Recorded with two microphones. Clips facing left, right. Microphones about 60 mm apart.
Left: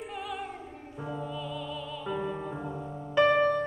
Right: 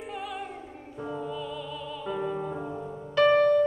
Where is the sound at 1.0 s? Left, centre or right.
Centre.